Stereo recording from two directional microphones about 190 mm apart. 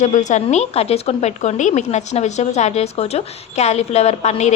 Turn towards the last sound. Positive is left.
turn(degrees=35)  # may be behind; listen again after turning